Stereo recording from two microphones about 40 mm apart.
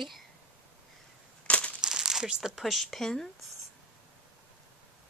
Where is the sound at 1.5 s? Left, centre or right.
Left.